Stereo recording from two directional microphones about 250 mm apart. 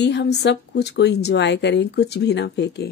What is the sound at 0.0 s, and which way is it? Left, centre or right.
A woman's voice, left.